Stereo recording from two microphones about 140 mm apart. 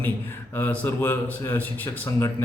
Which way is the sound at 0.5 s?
10° left (ahead or behind).